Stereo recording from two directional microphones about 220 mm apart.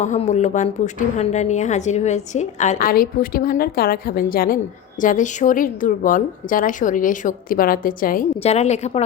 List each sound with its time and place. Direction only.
0.0 s a woman's voice: 35° left (ahead or behind)